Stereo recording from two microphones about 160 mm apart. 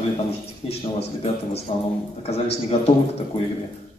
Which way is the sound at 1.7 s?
45° left (ahead or behind).